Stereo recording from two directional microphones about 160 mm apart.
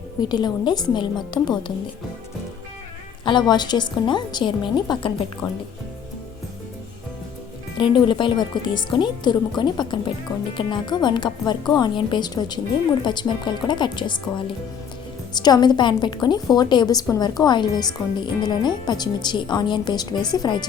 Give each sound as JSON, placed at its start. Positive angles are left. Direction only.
{"t": 0.2, "sound": "speech", "side_deg": 25}
{"t": 3.2, "sound": "speech", "side_deg": 25}
{"t": 7.8, "sound": "speech", "side_deg": 30}